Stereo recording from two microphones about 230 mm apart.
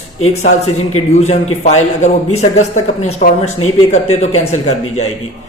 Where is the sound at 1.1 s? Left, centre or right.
Left.